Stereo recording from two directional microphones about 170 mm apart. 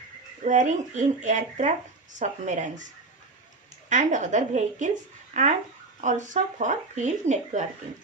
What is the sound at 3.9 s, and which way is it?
Speech, 45° right (ahead or behind).